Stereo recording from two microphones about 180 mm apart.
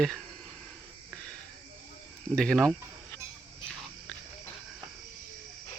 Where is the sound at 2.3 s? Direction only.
5° left (ahead or behind).